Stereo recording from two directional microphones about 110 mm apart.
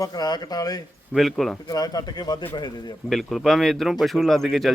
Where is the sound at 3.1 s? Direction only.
Centre (ahead or behind).